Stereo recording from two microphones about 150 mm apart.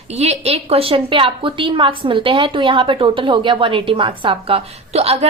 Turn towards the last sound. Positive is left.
turn(degrees=-45)  # may be behind; listen again after turning